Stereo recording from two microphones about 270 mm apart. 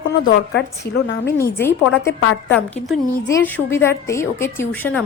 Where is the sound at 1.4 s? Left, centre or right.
Centre.